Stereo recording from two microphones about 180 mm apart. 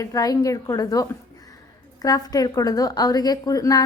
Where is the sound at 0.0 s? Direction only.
20° left (ahead or behind).